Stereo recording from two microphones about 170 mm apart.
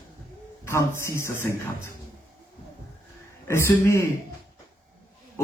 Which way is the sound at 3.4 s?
15° left (ahead or behind).